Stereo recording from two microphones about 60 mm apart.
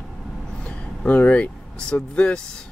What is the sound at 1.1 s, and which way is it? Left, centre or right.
Speech, left.